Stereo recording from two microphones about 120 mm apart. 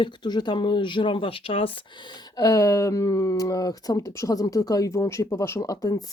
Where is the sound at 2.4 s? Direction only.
25° left (ahead or behind).